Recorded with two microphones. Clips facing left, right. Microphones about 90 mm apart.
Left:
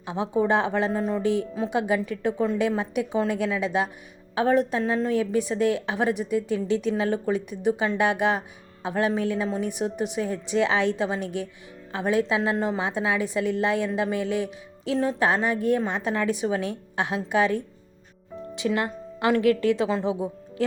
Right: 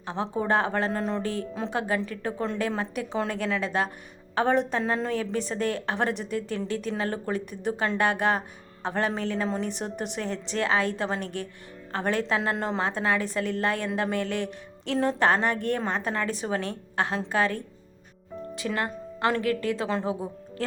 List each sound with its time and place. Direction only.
0.0 s a woman's voice: 10° left (ahead or behind)
0.9 s a woman's voice: 5° left (ahead or behind)
1.2 s a woman's voice: 15° left (ahead or behind)